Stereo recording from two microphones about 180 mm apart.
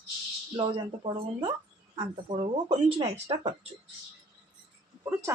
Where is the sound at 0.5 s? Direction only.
30° right (ahead or behind).